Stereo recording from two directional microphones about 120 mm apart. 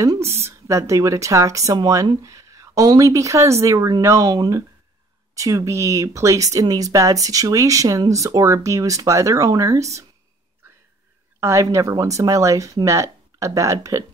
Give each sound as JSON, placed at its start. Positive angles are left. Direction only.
{"t": 0.2, "sound": "a woman's voice", "side_deg": -60}
{"t": 0.5, "sound": "speech", "side_deg": -25}
{"t": 11.3, "sound": "speech", "side_deg": -25}